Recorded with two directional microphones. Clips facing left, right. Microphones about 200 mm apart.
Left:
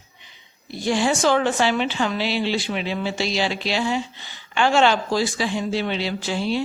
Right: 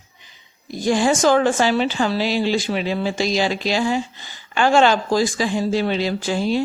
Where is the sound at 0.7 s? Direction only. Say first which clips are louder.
Right 3 dB; 45° right (ahead or behind).